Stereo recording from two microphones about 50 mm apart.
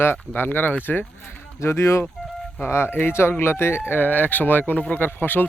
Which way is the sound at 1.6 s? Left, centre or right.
Left.